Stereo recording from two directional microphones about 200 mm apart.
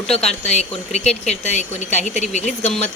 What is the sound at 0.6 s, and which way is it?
Speech, 35° left (ahead or behind).